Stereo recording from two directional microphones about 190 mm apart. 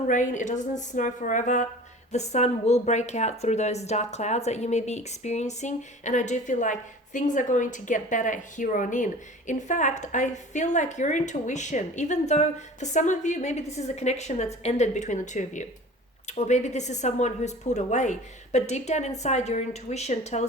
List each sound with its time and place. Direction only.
0.1 s speech: 40° left (ahead or behind)